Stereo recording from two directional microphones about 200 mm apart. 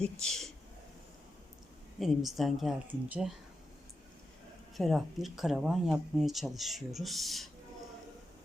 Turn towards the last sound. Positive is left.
turn(degrees=0)  # may be behind; listen again after turning